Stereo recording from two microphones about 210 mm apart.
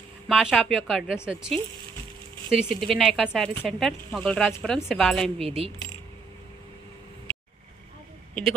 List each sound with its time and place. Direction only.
0.3 s speech: centre (ahead or behind)
5.4 s speech: 30° right (ahead or behind)